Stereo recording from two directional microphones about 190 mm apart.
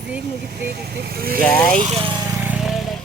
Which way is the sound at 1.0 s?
55° right (ahead or behind).